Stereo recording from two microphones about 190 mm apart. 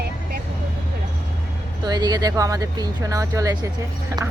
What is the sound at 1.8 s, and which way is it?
Speech, 20° right (ahead or behind).